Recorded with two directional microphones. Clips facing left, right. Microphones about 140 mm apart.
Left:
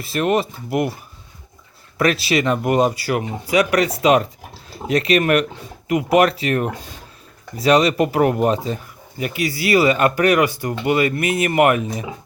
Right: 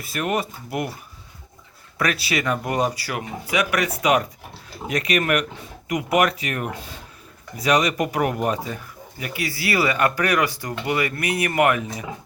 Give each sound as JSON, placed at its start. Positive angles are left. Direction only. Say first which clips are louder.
{"t": 0.0, "sound": "speech", "louder": "left 6 dB", "side_deg": 25}
{"t": 2.0, "sound": "speech", "louder": "left 6 dB", "side_deg": 25}